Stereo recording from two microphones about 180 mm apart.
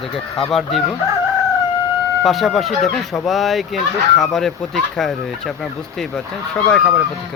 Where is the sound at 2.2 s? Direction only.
Centre (ahead or behind).